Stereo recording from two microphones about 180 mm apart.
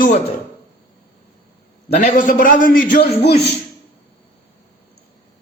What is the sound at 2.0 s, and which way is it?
A man's voice, 45° left (ahead or behind).